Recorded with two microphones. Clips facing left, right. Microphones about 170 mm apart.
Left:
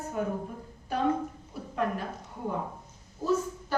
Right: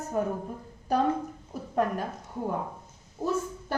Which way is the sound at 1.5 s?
40° right (ahead or behind).